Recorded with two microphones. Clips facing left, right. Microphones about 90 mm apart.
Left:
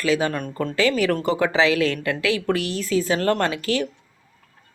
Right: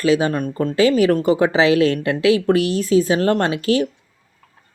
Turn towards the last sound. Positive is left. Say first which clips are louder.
# right 5 dB
turn(degrees=-20)  # may be behind; listen again after turning